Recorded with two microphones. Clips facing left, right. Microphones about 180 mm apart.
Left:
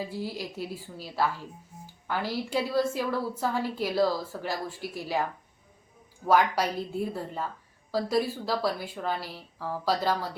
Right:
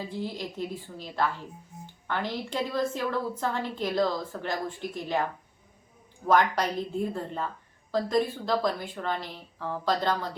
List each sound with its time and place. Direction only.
0.1 s a woman's voice: 10° left (ahead or behind)
6.2 s a woman's voice: 5° left (ahead or behind)